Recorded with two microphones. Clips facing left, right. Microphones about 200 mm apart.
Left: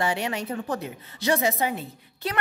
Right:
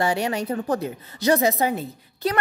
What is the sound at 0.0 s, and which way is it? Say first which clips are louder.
A woman's voice: right 4 dB; 40° right (ahead or behind).